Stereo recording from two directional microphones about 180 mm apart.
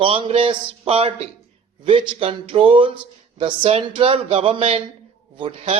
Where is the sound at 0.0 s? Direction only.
30° right (ahead or behind).